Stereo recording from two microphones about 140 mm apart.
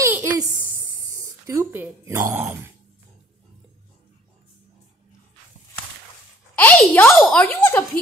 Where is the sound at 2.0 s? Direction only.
20° right (ahead or behind).